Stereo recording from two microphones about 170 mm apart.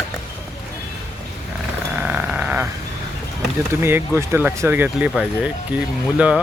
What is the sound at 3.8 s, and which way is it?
Speech, 15° right (ahead or behind).